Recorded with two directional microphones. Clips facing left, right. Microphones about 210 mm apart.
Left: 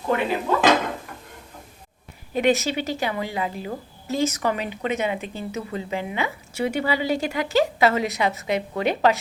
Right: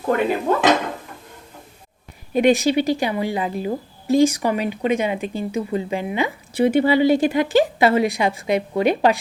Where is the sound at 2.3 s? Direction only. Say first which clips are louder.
Right 5 dB; 15° right (ahead or behind).